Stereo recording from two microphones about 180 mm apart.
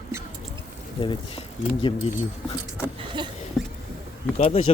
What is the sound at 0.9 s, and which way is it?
Speech, 30° left (ahead or behind).